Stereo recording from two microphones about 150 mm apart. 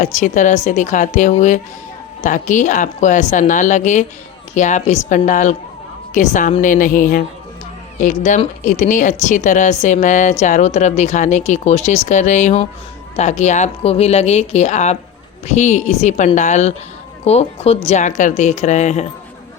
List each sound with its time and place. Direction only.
0.0 s a woman's voice: 55° left (ahead or behind)